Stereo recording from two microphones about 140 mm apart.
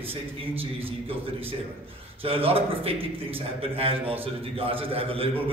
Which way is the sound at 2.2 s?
40° right (ahead or behind).